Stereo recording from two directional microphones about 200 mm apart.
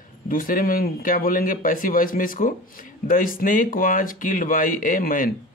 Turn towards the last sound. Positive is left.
turn(degrees=45)  # may be behind; listen again after turning